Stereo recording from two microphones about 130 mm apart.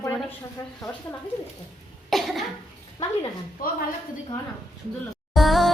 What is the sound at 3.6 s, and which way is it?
Speech, 90° left.